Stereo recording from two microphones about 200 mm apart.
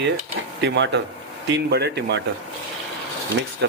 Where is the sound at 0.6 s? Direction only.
60° right (ahead or behind).